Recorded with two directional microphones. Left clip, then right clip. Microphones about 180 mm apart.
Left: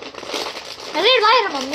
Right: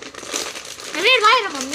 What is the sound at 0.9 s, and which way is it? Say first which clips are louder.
Speech: left 1 dB; 25° right (ahead or behind).